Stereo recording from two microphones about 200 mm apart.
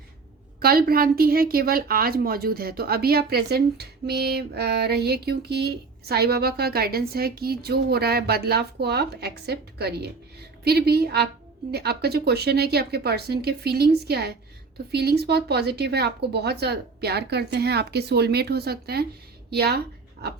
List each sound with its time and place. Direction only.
0.6 s a woman's voice: 50° right (ahead or behind)